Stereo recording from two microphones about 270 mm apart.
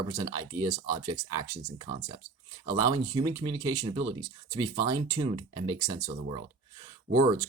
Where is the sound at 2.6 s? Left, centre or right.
Centre.